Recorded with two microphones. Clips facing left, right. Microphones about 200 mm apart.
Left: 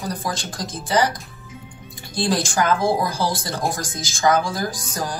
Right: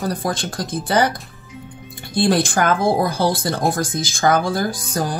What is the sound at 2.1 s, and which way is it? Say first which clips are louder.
Speech: right 4 dB; 55° right (ahead or behind).